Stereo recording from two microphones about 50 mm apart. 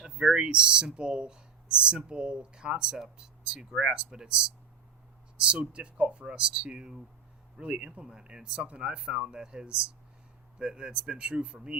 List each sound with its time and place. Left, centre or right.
0.0 s speech: centre
5.4 s speech: right